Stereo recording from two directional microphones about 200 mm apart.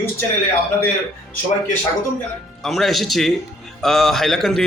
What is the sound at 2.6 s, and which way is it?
A man's voice, centre (ahead or behind).